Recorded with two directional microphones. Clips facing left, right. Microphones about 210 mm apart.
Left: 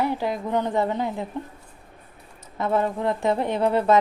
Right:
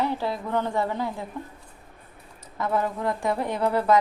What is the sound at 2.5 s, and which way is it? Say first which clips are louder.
Speech: left 3 dB; 25° left (ahead or behind).